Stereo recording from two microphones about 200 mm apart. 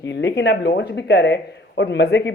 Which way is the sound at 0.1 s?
60° left (ahead or behind).